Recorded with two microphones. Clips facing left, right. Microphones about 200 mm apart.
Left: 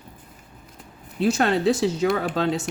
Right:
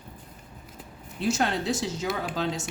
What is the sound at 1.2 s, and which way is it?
A woman's voice, 60° left (ahead or behind).